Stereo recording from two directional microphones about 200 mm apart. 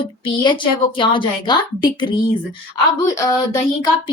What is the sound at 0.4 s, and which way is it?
A woman's voice, 25° left (ahead or behind).